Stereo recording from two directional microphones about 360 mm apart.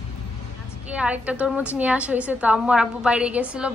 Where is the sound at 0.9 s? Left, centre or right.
Centre.